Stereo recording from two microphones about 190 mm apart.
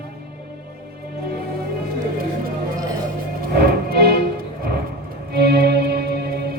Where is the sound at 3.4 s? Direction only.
55° right (ahead or behind).